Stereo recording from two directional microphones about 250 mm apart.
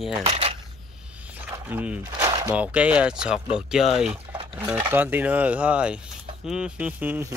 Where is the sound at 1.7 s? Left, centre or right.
Centre.